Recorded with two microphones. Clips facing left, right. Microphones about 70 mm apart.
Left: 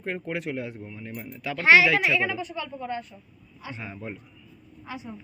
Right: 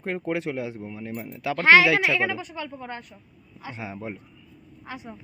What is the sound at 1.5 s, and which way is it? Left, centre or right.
Speech, right.